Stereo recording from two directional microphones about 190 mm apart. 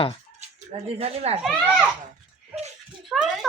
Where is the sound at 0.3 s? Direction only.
35° right (ahead or behind).